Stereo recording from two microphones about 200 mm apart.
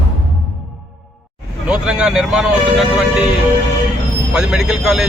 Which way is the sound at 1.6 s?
5° right (ahead or behind).